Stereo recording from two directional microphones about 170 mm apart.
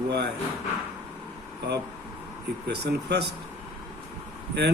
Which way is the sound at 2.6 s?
80° right.